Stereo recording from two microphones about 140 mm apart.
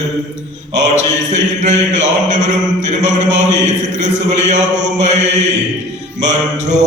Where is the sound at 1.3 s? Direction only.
55° right (ahead or behind).